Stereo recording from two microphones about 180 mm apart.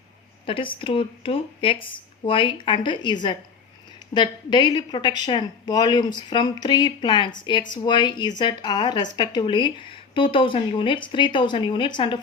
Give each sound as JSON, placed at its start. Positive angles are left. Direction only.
{"t": 0.4, "sound": "speech", "side_deg": 30}